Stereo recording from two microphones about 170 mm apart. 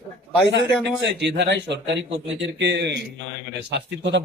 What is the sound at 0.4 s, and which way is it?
A man's voice, 90° right.